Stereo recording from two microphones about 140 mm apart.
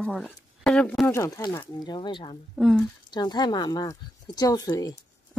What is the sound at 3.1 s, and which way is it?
Speech, 30° left (ahead or behind).